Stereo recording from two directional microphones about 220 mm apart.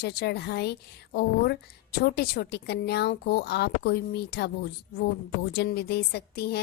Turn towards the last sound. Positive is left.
turn(degrees=45)  # may be behind; listen again after turning